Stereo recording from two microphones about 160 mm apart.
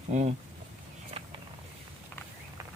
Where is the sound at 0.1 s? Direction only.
45° right (ahead or behind).